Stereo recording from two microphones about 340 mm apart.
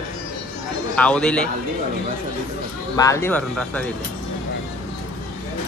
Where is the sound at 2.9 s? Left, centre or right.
Centre.